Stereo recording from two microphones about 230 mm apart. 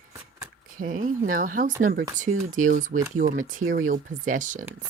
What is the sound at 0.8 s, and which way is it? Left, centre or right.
Speech, right.